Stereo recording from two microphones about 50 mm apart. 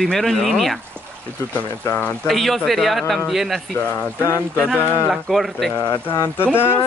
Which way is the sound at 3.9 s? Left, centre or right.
Left.